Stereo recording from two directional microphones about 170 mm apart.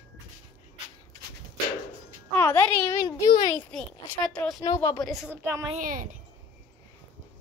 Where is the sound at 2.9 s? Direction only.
25° left (ahead or behind).